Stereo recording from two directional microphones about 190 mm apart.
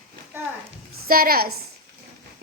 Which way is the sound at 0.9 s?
50° right (ahead or behind).